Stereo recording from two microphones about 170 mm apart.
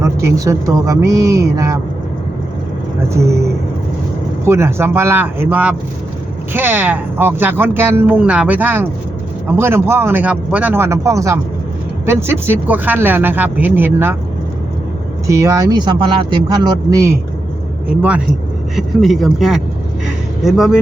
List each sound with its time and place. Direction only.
0.0 s speech: 15° right (ahead or behind)
3.1 s speech: 15° right (ahead or behind)
4.4 s speech: 15° right (ahead or behind)
15.3 s speech: 20° right (ahead or behind)
18.8 s a man's voice: centre (ahead or behind)